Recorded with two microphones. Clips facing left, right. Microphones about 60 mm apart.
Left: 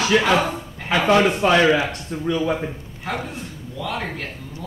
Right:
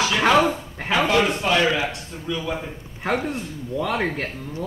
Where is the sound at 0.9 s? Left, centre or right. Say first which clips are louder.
Left 3 dB; left.